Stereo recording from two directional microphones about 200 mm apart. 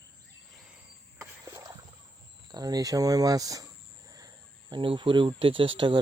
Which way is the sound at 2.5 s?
20° right (ahead or behind).